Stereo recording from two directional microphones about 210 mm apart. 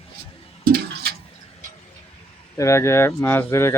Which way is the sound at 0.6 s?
45° right (ahead or behind).